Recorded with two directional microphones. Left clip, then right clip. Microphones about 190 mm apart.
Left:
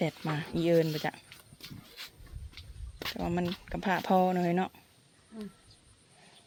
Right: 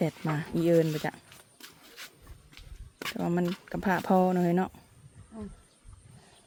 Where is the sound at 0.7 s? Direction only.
10° right (ahead or behind).